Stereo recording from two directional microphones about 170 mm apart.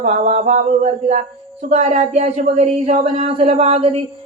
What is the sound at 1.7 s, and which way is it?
Speech, 40° right (ahead or behind).